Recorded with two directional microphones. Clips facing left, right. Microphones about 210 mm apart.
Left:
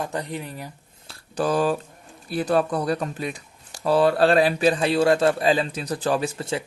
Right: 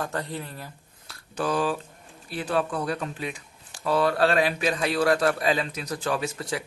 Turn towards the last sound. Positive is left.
turn(degrees=25)  # may be behind; listen again after turning